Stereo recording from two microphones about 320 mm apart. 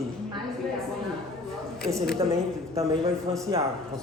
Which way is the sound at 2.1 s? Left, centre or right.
Centre.